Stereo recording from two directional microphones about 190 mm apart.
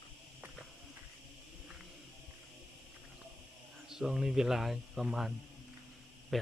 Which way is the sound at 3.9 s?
5° right (ahead or behind).